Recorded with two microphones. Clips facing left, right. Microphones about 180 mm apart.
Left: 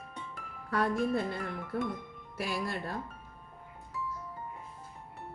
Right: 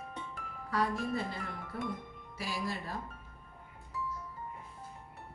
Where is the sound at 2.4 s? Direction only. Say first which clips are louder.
Left 3 dB; 60° left (ahead or behind).